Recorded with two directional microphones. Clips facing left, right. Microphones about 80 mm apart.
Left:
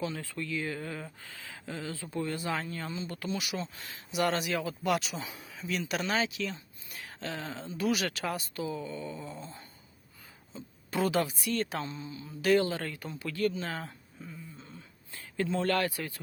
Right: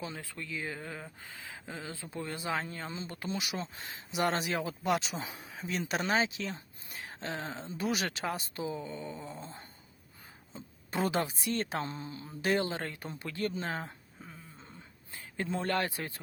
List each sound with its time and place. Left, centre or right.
0.2 s speech: centre
1.2 s speech: right
10.9 s speech: right